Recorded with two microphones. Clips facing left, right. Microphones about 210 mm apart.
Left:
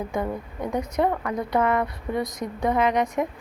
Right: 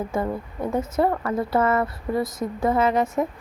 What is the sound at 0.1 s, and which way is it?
A woman's voice, 5° right (ahead or behind).